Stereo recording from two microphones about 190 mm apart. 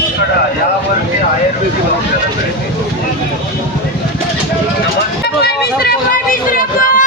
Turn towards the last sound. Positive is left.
turn(degrees=45)  # may be behind; listen again after turning